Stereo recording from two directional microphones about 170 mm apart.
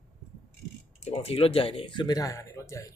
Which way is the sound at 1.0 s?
35° left (ahead or behind).